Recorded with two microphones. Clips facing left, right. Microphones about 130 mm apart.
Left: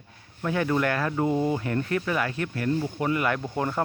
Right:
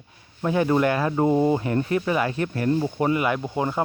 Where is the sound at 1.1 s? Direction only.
30° right (ahead or behind).